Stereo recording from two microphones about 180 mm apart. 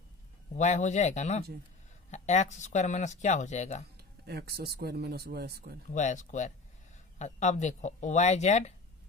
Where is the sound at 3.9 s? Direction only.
60° right (ahead or behind).